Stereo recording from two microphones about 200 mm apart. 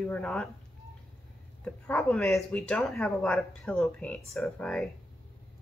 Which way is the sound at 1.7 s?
5° left (ahead or behind).